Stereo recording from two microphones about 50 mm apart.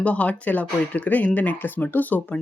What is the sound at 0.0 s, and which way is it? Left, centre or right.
Speech, left.